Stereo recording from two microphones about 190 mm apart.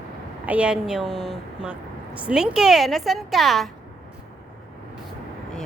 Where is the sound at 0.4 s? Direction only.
5° right (ahead or behind).